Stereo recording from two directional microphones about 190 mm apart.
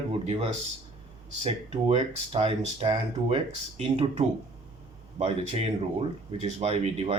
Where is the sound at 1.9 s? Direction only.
30° right (ahead or behind).